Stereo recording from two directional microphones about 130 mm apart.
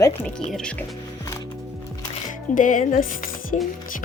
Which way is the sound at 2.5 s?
85° left.